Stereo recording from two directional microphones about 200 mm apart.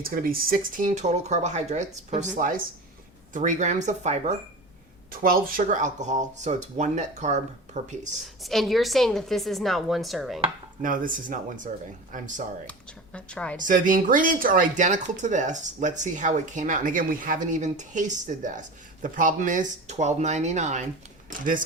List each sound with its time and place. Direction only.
0.0 s speech: 45° right (ahead or behind)
5.1 s speech: 45° right (ahead or behind)
8.2 s a woman's voice: centre (ahead or behind)
10.8 s speech: 45° right (ahead or behind)
13.1 s a woman's voice: 5° left (ahead or behind)
13.6 s speech: 40° right (ahead or behind)